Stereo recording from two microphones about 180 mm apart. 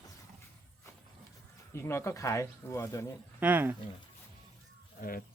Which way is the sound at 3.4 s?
10° right (ahead or behind).